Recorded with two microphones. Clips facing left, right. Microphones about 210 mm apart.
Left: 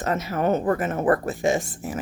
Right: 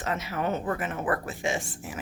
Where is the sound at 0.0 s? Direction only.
40° left (ahead or behind).